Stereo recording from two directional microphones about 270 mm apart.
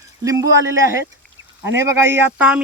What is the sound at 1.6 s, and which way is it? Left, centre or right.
Speech, centre.